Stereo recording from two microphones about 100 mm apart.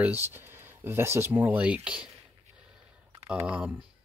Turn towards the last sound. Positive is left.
turn(degrees=-10)  # may be behind; listen again after turning